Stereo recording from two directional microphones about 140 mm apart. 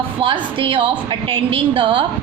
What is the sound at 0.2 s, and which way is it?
A woman's voice, 40° right (ahead or behind).